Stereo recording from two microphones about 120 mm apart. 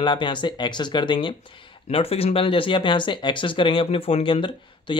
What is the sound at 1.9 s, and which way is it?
Speech, 55° left (ahead or behind).